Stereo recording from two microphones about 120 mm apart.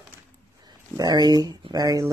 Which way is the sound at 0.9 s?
35° right (ahead or behind).